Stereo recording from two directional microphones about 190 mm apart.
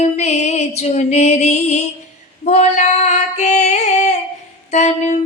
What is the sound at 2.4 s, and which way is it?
Female singing, 35° left (ahead or behind).